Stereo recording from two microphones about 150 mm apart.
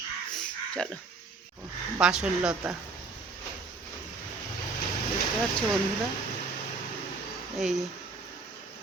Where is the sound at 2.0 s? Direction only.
5° right (ahead or behind).